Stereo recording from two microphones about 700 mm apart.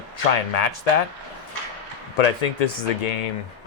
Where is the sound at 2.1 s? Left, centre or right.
Left.